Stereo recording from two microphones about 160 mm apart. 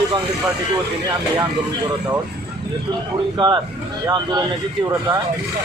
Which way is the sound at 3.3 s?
30° right (ahead or behind).